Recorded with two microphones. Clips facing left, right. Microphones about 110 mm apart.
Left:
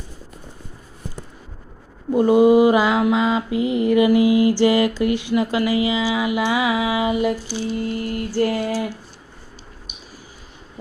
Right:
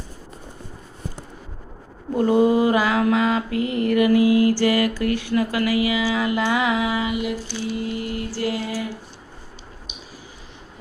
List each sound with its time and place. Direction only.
2.1 s mantra: 15° left (ahead or behind)
7.1 s a sound: 40° left (ahead or behind)
7.9 s music: 45° left (ahead or behind)